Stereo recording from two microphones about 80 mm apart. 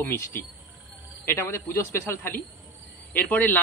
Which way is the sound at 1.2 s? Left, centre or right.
Left.